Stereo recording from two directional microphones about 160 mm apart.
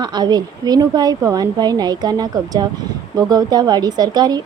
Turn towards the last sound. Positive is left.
turn(degrees=-25)  # may be behind; listen again after turning